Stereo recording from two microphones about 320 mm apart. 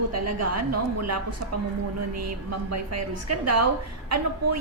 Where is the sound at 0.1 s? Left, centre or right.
Right.